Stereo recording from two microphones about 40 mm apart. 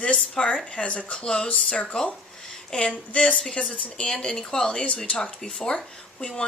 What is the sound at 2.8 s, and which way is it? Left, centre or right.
Speech, left.